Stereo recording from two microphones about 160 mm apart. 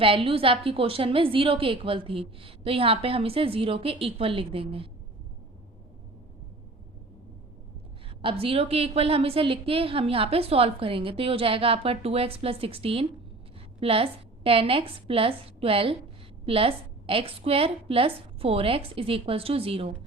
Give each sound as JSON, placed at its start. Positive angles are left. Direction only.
{"t": 0.0, "sound": "a woman's voice", "side_deg": -35}
{"t": 8.2, "sound": "a woman's voice", "side_deg": -35}